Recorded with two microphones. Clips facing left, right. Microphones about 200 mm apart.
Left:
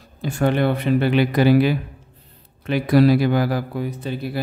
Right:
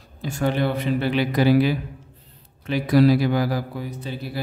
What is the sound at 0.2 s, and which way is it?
Speech, 60° left (ahead or behind).